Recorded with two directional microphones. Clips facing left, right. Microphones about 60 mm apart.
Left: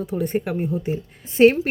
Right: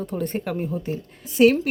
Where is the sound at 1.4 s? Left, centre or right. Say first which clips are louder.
Left 2 dB; left.